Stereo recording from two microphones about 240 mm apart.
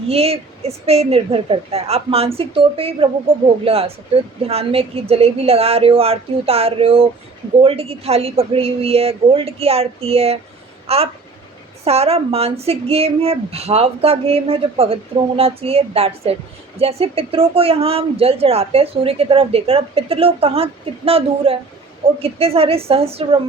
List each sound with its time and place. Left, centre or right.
0.1 s speech: right